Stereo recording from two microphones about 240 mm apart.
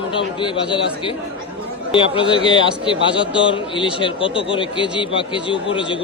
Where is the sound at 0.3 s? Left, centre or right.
Centre.